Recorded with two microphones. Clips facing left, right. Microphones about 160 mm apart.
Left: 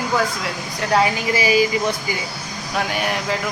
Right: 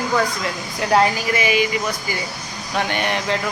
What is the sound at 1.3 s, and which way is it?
Speech, 35° left (ahead or behind).